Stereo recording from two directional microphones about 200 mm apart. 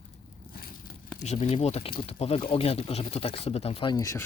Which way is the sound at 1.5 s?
30° left (ahead or behind).